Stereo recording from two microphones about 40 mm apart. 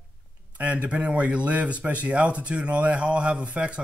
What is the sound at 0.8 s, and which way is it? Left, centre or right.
Speech, right.